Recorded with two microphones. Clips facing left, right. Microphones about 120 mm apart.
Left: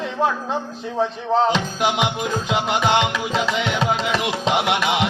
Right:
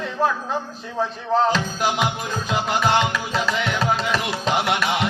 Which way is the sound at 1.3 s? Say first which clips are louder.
Left 1 dB; 20° left (ahead or behind).